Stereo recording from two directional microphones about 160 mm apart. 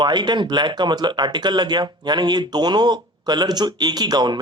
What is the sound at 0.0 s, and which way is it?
Speech, 25° right (ahead or behind).